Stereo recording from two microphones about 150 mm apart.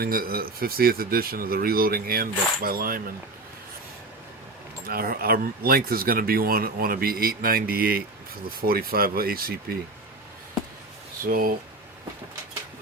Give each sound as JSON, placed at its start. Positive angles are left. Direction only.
{"t": 0.0, "sound": "speech", "side_deg": -80}
{"t": 4.9, "sound": "speech", "side_deg": -80}
{"t": 11.2, "sound": "speech", "side_deg": -70}